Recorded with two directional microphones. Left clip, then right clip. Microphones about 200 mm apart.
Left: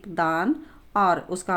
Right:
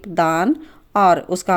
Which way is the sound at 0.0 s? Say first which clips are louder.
Right 6 dB; 35° right (ahead or behind).